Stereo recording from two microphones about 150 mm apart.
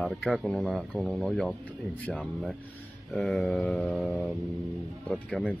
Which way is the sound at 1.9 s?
10° left (ahead or behind).